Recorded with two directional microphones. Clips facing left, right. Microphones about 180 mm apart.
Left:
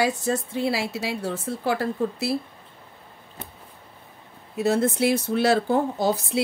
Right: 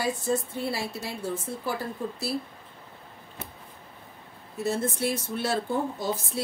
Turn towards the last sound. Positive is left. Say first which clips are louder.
# left 6 dB
turn(degrees=75)  # may be behind; listen again after turning